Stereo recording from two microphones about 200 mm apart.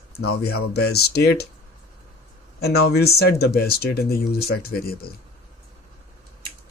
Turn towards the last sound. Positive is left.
turn(degrees=50)  # may be behind; listen again after turning